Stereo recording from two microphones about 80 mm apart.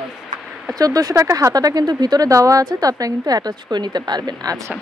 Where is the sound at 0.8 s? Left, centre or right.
Right.